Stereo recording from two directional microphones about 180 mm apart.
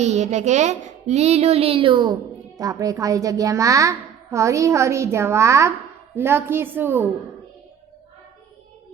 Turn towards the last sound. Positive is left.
turn(degrees=-10)  # may be behind; listen again after turning